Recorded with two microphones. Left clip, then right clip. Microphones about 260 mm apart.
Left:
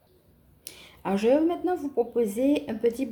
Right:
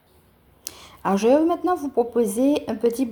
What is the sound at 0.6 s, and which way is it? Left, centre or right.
Speech, right.